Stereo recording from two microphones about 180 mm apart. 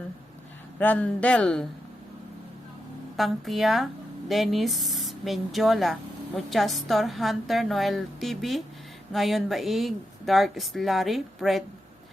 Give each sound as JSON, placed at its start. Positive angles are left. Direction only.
{"t": 0.8, "sound": "speech", "side_deg": 10}
{"t": 3.2, "sound": "speech", "side_deg": 0}